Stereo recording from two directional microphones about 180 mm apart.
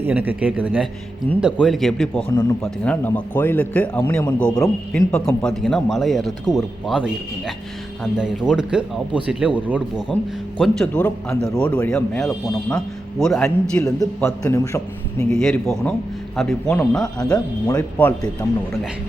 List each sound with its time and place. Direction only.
0.0 s speech: 10° right (ahead or behind)
2.3 s a man's voice: 20° left (ahead or behind); by 10.0 s 5° right (ahead or behind)
10.6 s speech: 5° left (ahead or behind)
13.8 s a man's voice: 15° left (ahead or behind)
15.3 s speech: 5° left (ahead or behind)